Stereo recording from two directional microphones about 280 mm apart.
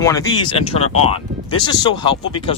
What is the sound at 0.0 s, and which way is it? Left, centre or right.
Speech, centre.